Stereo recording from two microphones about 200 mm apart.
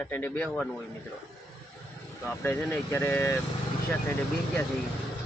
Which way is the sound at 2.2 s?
10° left (ahead or behind).